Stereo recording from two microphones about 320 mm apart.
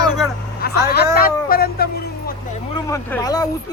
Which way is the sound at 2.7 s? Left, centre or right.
Centre.